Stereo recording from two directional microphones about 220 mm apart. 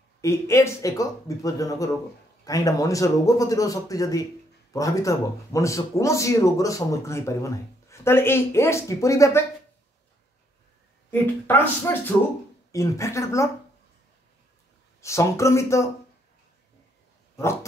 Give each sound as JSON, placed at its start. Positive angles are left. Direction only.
{"t": 0.2, "sound": "speech", "side_deg": 15}
{"t": 11.1, "sound": "speech", "side_deg": 10}
{"t": 15.0, "sound": "speech", "side_deg": 15}